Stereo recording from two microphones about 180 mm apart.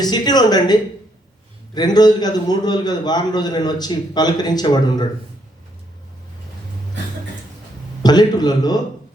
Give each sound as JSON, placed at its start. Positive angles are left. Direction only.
{"t": 0.0, "sound": "a man's voice", "side_deg": 20}
{"t": 8.0, "sound": "a man's voice", "side_deg": 25}